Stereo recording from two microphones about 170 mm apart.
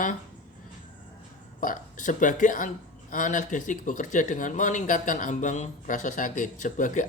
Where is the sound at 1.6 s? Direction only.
50° left (ahead or behind).